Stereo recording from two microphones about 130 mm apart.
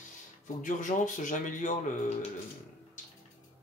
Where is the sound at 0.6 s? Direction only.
80° left.